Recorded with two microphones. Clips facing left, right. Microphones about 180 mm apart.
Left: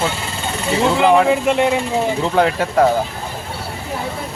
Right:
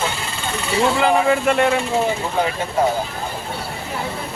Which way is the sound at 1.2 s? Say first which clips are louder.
Left 1 dB; 15° left (ahead or behind).